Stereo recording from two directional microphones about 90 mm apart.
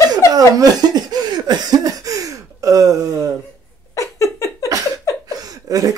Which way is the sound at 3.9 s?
35° left (ahead or behind).